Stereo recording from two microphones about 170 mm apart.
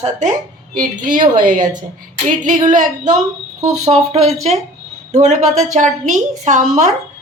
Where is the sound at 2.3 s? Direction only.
50° right (ahead or behind).